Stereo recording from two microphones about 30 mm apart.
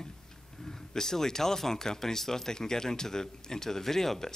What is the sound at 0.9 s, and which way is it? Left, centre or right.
Speech, centre.